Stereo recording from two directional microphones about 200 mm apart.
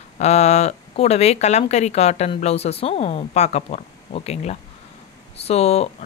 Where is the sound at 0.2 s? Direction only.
35° left (ahead or behind).